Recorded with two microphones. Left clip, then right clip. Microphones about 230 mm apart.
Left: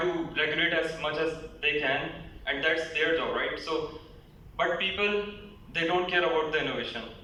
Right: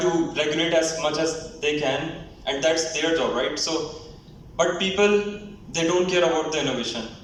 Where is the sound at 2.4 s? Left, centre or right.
Right.